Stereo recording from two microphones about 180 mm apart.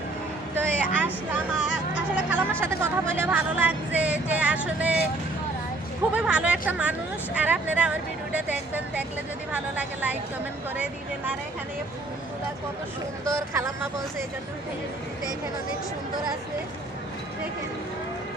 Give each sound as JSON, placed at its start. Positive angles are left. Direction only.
{"t": 0.6, "sound": "vehicle", "side_deg": -10}
{"t": 2.0, "sound": "a sound", "side_deg": -10}
{"t": 2.6, "sound": "speech", "side_deg": -10}
{"t": 6.1, "sound": "speech", "side_deg": -5}
{"t": 13.2, "sound": "speech", "side_deg": -15}